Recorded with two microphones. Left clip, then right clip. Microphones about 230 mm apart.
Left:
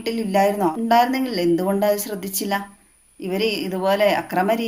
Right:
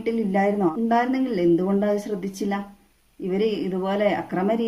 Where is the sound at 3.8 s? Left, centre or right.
Centre.